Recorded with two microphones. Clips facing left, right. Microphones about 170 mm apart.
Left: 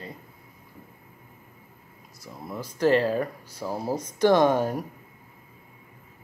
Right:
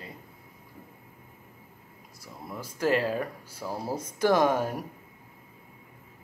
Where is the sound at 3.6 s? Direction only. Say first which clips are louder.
Left 4 dB; 20° left (ahead or behind).